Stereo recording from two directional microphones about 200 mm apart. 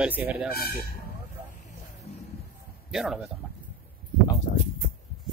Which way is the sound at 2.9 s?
Centre (ahead or behind).